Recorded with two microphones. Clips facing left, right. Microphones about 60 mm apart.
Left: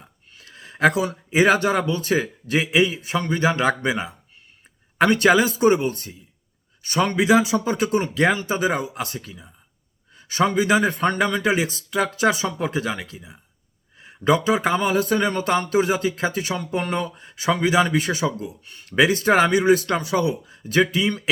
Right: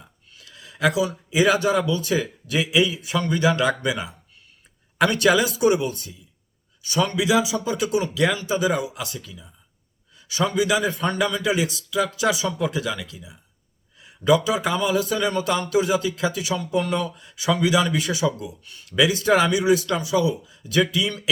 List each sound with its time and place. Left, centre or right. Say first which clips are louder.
0.3 s speech: left 4 dB; left